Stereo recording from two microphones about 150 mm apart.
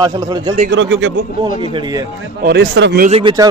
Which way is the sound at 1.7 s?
25° right (ahead or behind).